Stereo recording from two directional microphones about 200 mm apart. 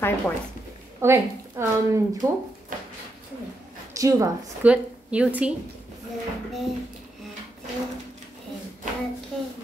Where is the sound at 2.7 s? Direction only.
40° right (ahead or behind).